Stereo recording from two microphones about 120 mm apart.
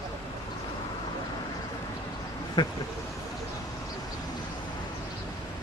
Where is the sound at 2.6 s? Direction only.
40° left (ahead or behind).